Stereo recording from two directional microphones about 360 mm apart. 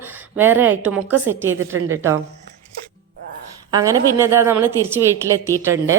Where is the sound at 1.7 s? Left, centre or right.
Right.